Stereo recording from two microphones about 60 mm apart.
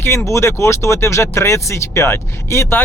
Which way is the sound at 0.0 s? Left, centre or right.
Left.